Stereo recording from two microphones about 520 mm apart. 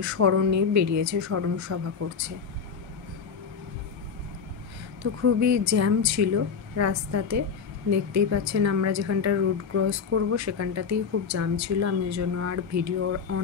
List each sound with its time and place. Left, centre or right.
0.0 s a woman's voice: right
5.2 s a woman's voice: right